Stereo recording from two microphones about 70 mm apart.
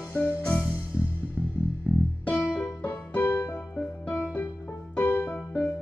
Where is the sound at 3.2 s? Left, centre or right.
Left.